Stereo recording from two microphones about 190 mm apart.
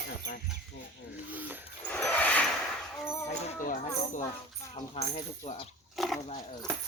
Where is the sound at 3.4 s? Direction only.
45° left (ahead or behind).